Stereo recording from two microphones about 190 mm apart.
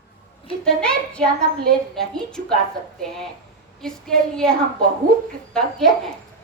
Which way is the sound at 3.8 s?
5° left (ahead or behind).